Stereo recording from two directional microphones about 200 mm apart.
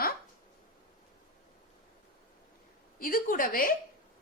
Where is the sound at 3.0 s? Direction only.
45° left (ahead or behind).